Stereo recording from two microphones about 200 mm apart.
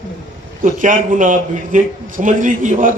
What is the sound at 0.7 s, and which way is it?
A man's voice, 40° right (ahead or behind).